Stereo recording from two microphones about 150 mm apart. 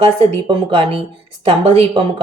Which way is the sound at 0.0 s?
40° right (ahead or behind).